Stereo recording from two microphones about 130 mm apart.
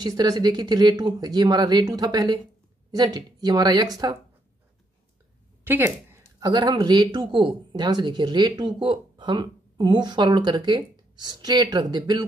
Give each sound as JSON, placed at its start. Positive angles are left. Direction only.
{"t": 0.0, "sound": "speech", "side_deg": -30}
{"t": 5.6, "sound": "speech", "side_deg": -15}
{"t": 6.4, "sound": "speech", "side_deg": -35}